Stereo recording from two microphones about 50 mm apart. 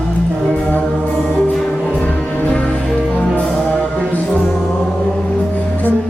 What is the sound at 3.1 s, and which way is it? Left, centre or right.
Music, left.